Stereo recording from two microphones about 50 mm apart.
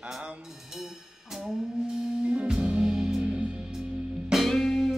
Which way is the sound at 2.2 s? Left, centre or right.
Right.